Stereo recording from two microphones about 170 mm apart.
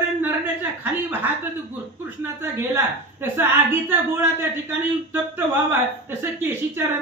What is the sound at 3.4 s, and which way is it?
Speech, 15° right (ahead or behind).